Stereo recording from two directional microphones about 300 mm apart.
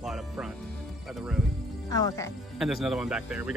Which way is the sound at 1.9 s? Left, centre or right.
Centre.